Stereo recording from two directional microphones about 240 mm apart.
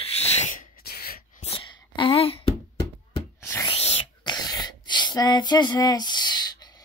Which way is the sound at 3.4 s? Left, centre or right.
Centre.